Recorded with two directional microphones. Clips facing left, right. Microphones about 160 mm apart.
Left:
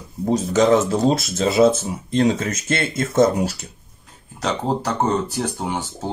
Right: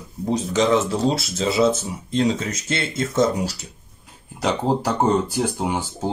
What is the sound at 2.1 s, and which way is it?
Speech, 50° left (ahead or behind).